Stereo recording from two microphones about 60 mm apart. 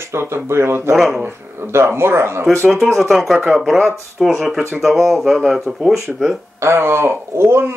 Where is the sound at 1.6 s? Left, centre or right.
Right.